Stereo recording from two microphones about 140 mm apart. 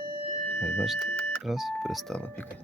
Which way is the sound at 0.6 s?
5° left (ahead or behind).